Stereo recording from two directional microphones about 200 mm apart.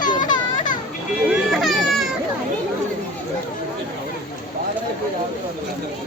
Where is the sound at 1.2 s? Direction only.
Centre (ahead or behind).